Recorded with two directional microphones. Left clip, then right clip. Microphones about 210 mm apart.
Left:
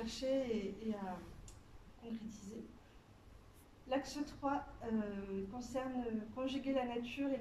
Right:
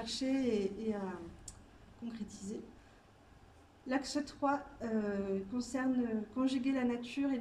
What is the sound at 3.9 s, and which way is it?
A woman's voice, 45° right (ahead or behind).